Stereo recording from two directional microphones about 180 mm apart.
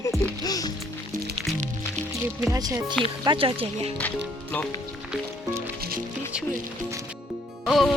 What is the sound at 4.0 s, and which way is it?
Speech, 10° left (ahead or behind).